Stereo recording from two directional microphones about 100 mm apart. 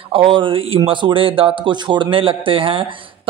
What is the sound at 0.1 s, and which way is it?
A man's voice, 60° right (ahead or behind).